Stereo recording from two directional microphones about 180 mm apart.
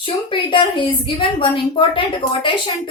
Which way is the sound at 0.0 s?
30° left (ahead or behind).